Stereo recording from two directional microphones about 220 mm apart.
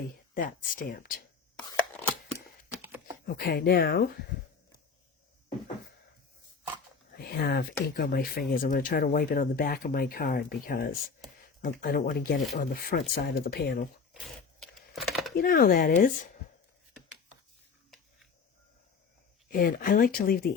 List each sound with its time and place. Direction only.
0.3 s speech: 40° left (ahead or behind)
1.5 s chopping: 5° left (ahead or behind)
2.8 s a sound: 10° right (ahead or behind)
3.2 s speech: 45° left (ahead or behind)
7.2 s speech: 45° left (ahead or behind)
14.1 s a sound: centre (ahead or behind)
15.4 s speech: 40° left (ahead or behind)
19.5 s speech: 40° left (ahead or behind)